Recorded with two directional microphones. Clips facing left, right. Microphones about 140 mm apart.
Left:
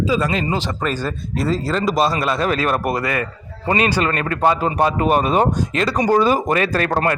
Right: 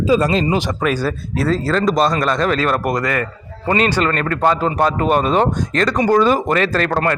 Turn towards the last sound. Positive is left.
turn(degrees=25)  # may be behind; listen again after turning